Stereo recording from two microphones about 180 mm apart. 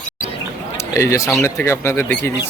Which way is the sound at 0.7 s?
15° left (ahead or behind).